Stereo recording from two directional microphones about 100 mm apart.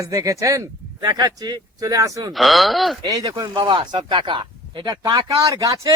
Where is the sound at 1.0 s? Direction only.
45° right (ahead or behind).